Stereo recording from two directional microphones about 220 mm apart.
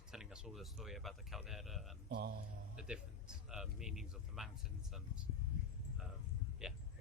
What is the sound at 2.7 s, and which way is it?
Speech, 5° right (ahead or behind).